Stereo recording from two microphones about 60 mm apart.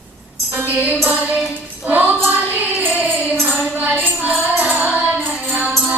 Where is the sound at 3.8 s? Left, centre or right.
Right.